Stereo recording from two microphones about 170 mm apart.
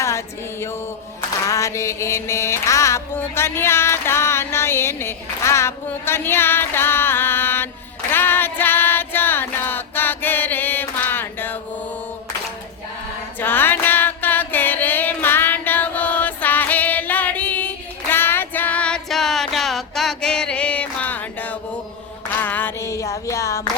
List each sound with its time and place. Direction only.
0.0 s music: 15° left (ahead or behind)
8.1 s female singing: 10° left (ahead or behind)
13.4 s music: 10° left (ahead or behind)
18.1 s child singing: 15° left (ahead or behind)
22.4 s music: 10° left (ahead or behind)